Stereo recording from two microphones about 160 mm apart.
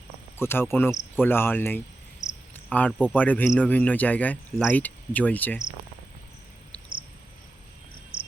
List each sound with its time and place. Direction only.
0.3 s speech: 15° left (ahead or behind)
8.1 s cricket: 5° right (ahead or behind)